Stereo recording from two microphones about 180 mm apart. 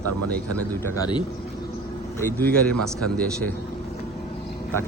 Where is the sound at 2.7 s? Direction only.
5° left (ahead or behind).